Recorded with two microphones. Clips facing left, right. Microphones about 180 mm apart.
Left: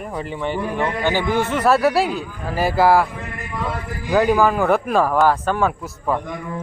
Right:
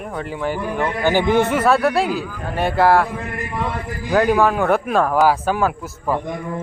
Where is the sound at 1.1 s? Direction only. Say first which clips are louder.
Right 8 dB; 20° right (ahead or behind).